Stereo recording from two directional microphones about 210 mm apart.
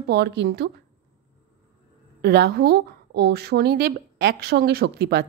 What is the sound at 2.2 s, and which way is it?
Speech, 50° right (ahead or behind).